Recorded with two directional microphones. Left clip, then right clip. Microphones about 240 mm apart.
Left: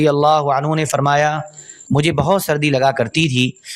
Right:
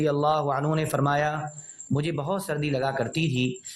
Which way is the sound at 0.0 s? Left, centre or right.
Left.